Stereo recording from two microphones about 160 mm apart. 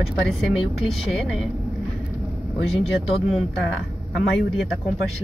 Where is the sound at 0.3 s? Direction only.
Centre (ahead or behind).